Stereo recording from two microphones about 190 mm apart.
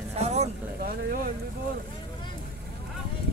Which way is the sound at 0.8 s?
50° right (ahead or behind).